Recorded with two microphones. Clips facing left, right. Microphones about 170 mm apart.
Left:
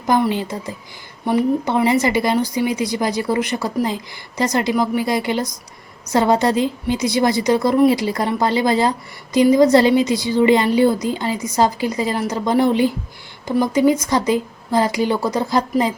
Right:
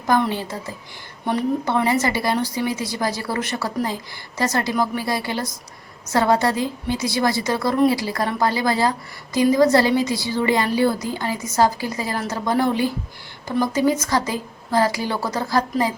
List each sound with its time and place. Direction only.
0.1 s a woman's voice: 15° left (ahead or behind)